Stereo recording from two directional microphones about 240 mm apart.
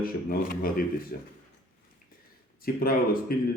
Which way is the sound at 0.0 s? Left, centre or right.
Left.